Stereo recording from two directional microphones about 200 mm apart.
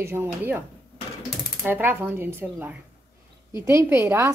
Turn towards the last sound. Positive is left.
turn(degrees=-15)  # may be behind; listen again after turning